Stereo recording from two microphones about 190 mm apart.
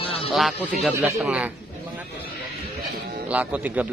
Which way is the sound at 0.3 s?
Centre (ahead or behind).